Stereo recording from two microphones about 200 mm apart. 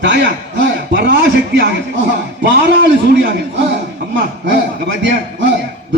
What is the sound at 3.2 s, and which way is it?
A man's voice, 65° right (ahead or behind).